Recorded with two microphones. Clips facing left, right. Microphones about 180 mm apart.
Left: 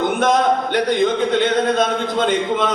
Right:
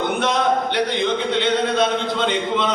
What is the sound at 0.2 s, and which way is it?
Speech, 45° left (ahead or behind).